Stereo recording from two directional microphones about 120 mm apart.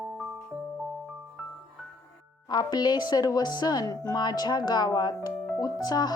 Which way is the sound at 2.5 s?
35° left (ahead or behind).